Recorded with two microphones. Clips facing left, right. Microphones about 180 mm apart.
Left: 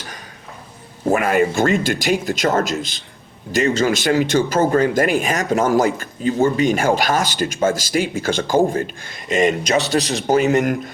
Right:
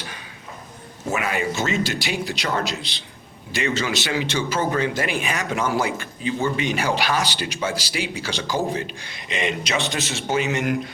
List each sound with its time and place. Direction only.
1.0 s speech: 50° left (ahead or behind)